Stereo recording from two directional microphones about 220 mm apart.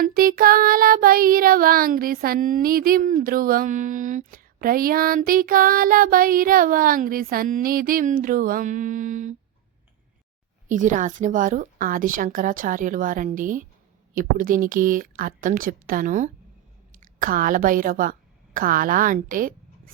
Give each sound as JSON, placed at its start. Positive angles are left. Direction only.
{"t": 0.0, "sound": "child singing", "side_deg": -40}
{"t": 10.7, "sound": "child singing", "side_deg": -35}
{"t": 17.2, "sound": "a woman's voice", "side_deg": -40}